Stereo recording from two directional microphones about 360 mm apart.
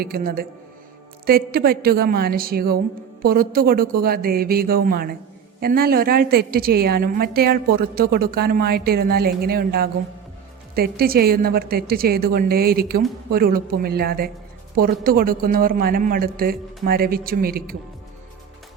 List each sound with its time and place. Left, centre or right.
0.0 s a woman's voice: right